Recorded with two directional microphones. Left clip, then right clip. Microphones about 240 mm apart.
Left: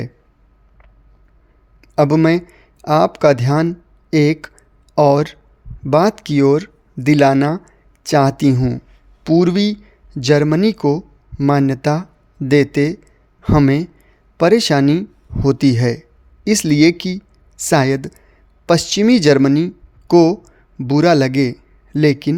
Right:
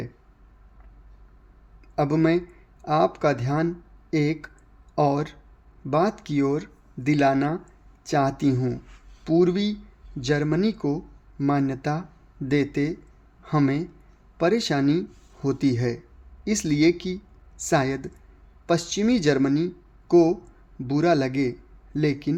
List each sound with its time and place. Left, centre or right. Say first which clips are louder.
1.8 s a man's voice: left 9 dB; left